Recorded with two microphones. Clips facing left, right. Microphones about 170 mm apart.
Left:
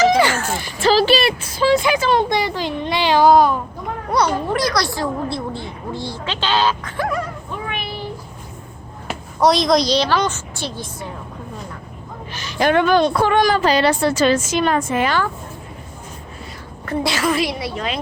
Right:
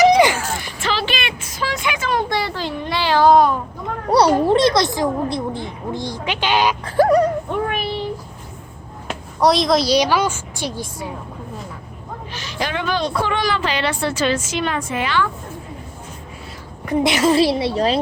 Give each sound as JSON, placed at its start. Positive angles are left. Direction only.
{"t": 0.0, "sound": "a sound", "side_deg": -15}
{"t": 0.6, "sound": "a sound", "side_deg": 35}
{"t": 2.3, "sound": "speech", "side_deg": 15}
{"t": 3.2, "sound": "a child's voice", "side_deg": 0}
{"t": 4.1, "sound": "speech", "side_deg": -30}
{"t": 6.8, "sound": "a sound", "side_deg": -35}
{"t": 7.7, "sound": "child singing", "side_deg": -40}
{"t": 9.0, "sound": "a woman's voice", "side_deg": 0}
{"t": 12.3, "sound": "a woman's voice", "side_deg": 50}
{"t": 16.8, "sound": "a woman's voice", "side_deg": -20}